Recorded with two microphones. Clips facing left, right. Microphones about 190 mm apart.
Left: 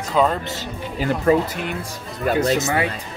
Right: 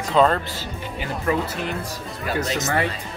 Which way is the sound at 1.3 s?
30° left (ahead or behind).